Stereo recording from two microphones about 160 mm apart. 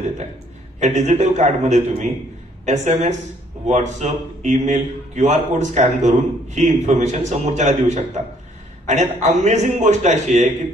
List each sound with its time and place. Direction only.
0.7 s a man's voice: 45° right (ahead or behind)